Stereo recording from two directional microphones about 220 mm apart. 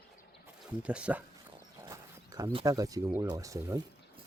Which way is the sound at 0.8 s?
5° right (ahead or behind).